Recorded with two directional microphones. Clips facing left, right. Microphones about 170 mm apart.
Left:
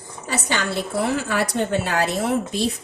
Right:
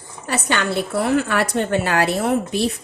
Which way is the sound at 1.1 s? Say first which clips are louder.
Right 4 dB; 65° right (ahead or behind).